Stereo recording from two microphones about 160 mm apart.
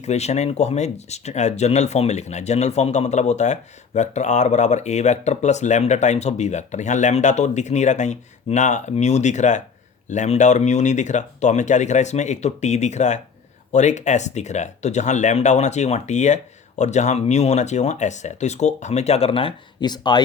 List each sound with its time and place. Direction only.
0.0 s speech: 45° left (ahead or behind); by 20.2 s 25° left (ahead or behind)